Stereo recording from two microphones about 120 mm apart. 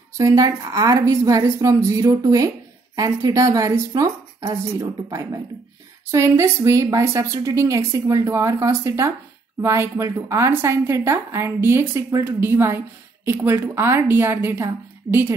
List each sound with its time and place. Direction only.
0.2 s a woman's voice: 25° right (ahead or behind)